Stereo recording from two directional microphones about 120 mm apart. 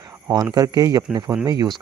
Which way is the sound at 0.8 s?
30° right (ahead or behind).